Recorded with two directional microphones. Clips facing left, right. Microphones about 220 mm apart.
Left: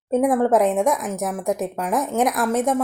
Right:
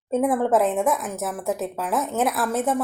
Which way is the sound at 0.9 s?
Centre (ahead or behind).